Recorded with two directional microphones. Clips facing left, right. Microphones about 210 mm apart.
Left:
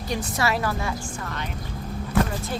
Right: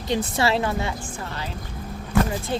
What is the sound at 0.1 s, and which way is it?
A woman's voice, 25° right (ahead or behind).